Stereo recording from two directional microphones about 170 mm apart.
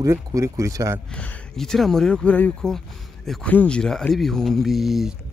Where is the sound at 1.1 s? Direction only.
5° left (ahead or behind).